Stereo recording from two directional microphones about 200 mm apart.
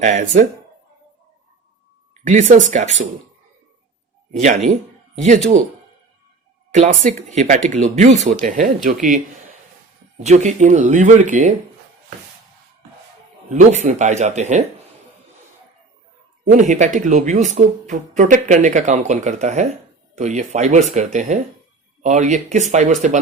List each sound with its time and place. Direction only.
0.0 s speech: 40° right (ahead or behind)
2.2 s speech: 40° right (ahead or behind)
4.3 s speech: 35° right (ahead or behind)
6.7 s speech: 35° right (ahead or behind)
13.5 s speech: 35° right (ahead or behind)
16.4 s speech: 40° right (ahead or behind)